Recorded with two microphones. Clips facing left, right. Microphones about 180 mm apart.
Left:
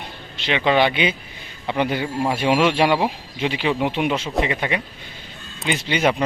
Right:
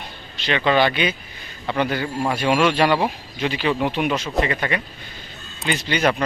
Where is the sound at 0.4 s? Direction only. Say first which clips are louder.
Even; 15° left (ahead or behind).